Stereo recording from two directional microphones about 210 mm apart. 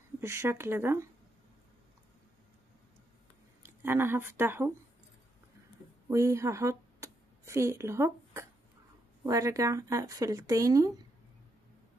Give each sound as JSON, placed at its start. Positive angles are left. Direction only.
{"t": 0.2, "sound": "speech", "side_deg": -10}
{"t": 3.6, "sound": "speech", "side_deg": -10}
{"t": 6.0, "sound": "a sound", "side_deg": -15}
{"t": 9.2, "sound": "speech", "side_deg": -15}